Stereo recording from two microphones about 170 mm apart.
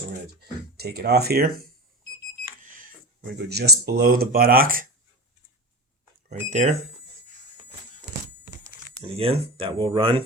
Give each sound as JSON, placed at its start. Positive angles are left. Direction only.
{"t": 0.8, "sound": "speech", "side_deg": -70}
{"t": 2.6, "sound": "cash register", "side_deg": -50}
{"t": 3.3, "sound": "speech", "side_deg": -75}
{"t": 6.2, "sound": "speech", "side_deg": -45}
{"t": 9.1, "sound": "speech", "side_deg": -35}